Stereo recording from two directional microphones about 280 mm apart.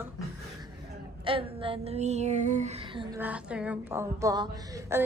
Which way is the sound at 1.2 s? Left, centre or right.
Centre.